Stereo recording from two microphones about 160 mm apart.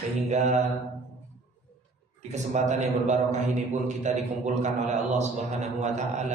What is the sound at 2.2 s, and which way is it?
A man's voice, 45° right (ahead or behind).